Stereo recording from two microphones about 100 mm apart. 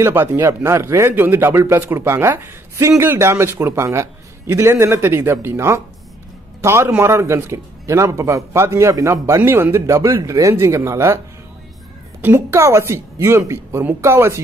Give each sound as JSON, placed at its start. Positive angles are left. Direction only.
{"t": 0.0, "sound": "a man's voice", "side_deg": -25}
{"t": 12.2, "sound": "a man's voice", "side_deg": -20}